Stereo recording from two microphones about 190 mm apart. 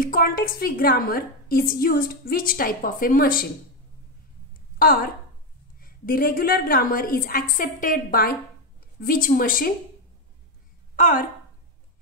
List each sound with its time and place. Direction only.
0.0 s a woman's voice: 50° left (ahead or behind)
4.7 s a woman's voice: 50° left (ahead or behind)
11.0 s a woman's voice: 45° left (ahead or behind)